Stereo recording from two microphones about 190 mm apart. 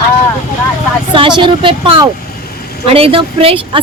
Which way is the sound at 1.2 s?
25° right (ahead or behind).